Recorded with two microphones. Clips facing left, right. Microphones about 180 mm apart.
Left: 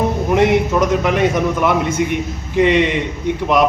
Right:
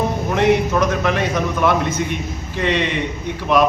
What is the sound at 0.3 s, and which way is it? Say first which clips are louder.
A man's voice: left 2 dB; 15° left (ahead or behind).